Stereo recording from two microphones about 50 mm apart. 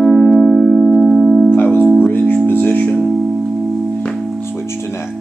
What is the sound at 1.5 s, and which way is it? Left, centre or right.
Music, left.